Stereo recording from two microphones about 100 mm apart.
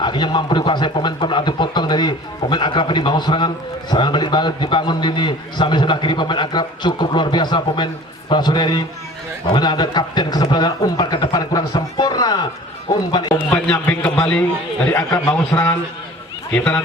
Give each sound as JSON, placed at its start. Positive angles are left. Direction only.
{"t": 0.0, "sound": "speech", "side_deg": 50}
{"t": 13.5, "sound": "a man's voice", "side_deg": 15}